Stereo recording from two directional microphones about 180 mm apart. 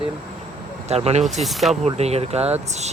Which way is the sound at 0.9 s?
35° right (ahead or behind).